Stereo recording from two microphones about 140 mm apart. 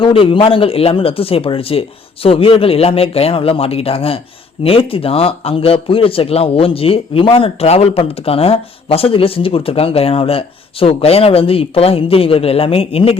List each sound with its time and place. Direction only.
0.0 s speech: 40° left (ahead or behind)